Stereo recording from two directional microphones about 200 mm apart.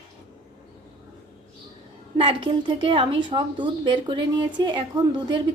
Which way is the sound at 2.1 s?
25° right (ahead or behind).